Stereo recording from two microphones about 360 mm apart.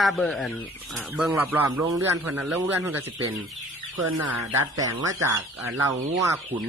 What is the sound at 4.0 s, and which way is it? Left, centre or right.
Speech, right.